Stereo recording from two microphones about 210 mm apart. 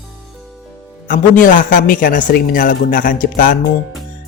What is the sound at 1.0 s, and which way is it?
Speech, 40° left (ahead or behind).